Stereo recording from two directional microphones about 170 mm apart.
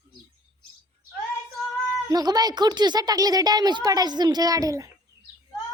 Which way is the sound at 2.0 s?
25° right (ahead or behind).